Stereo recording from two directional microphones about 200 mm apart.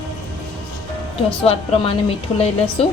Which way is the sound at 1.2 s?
30° left (ahead or behind).